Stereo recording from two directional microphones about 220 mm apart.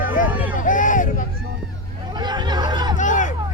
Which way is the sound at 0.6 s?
35° left (ahead or behind).